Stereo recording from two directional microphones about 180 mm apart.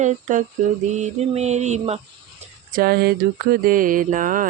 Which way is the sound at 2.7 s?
55° right (ahead or behind).